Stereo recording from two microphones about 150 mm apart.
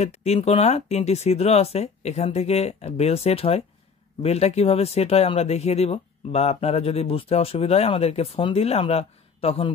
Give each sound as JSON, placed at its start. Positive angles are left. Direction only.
{"t": 0.0, "sound": "speech", "side_deg": 45}